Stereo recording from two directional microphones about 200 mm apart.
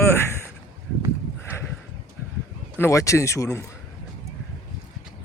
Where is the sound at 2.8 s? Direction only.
15° left (ahead or behind).